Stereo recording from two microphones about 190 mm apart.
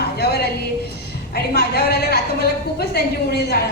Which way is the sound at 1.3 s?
55° left (ahead or behind).